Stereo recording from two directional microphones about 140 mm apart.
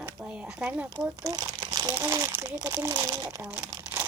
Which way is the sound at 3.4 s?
10° right (ahead or behind).